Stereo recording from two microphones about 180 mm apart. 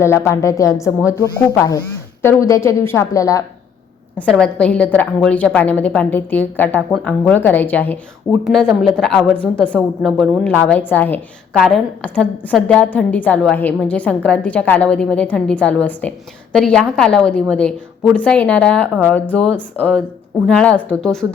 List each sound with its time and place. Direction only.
0.0 s a woman's voice: 15° left (ahead or behind)
2.2 s a woman's voice: 15° left (ahead or behind)
4.1 s a woman's voice: 5° left (ahead or behind)